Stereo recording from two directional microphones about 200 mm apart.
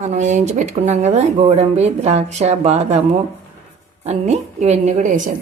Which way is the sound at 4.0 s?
35° right (ahead or behind).